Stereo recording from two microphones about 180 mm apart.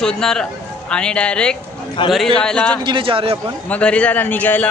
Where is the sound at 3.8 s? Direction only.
5° left (ahead or behind).